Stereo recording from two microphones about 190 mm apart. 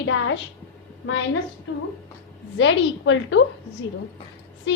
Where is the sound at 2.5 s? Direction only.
75° left (ahead or behind).